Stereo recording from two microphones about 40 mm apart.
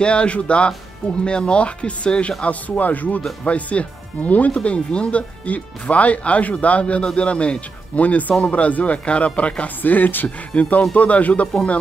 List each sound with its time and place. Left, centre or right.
0.0 s speech: left
4.6 s speech: left
5.5 s speech: left
9.9 s speech: left
10.2 s speech: left